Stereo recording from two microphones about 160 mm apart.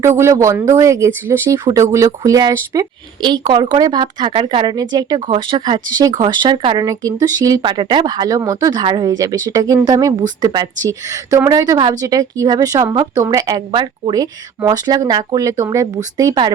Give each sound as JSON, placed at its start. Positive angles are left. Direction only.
{"t": 0.2, "sound": "speech", "side_deg": -20}